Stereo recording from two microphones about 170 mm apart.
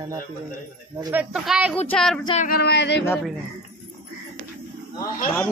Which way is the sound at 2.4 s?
65° left (ahead or behind).